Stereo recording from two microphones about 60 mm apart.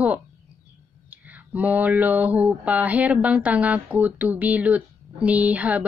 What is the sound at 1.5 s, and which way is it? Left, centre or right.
Speech, right.